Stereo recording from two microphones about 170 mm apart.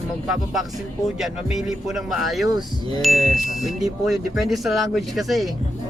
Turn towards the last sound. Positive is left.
turn(degrees=0)  # may be behind; listen again after turning